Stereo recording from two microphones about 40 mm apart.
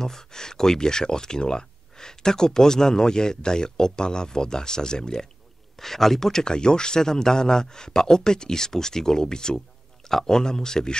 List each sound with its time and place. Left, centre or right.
0.0 s speech: centre
5.8 s speech: centre